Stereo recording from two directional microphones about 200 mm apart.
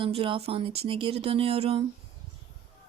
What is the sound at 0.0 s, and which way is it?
Speech, 25° right (ahead or behind).